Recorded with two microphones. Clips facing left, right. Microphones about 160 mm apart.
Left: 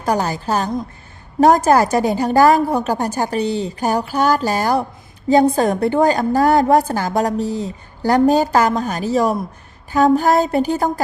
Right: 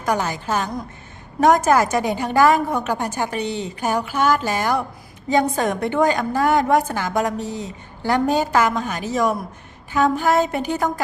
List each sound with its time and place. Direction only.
0.0 s a woman's voice: 35° left (ahead or behind)